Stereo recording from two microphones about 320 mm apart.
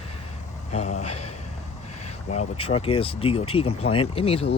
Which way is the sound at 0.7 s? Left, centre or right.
Left.